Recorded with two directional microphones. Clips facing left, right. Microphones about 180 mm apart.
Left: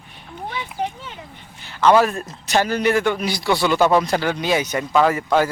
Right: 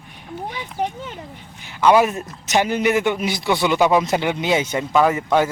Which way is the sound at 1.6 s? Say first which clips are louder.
Even; 10° right (ahead or behind).